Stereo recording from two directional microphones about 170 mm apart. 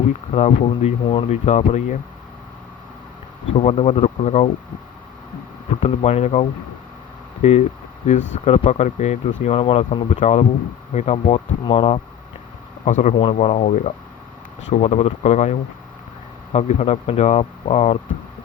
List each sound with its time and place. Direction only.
0.3 s speech: 40° left (ahead or behind)
3.6 s speech: 40° left (ahead or behind)
5.8 s speech: 40° left (ahead or behind)
12.8 s speech: 45° left (ahead or behind)